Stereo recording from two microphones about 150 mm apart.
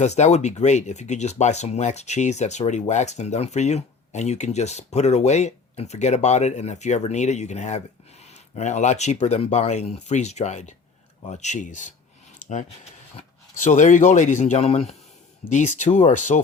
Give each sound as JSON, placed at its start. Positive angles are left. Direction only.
{"t": 0.0, "sound": "speech", "side_deg": 50}